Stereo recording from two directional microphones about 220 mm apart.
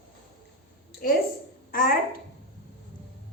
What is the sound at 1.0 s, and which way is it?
Speech, 40° left (ahead or behind).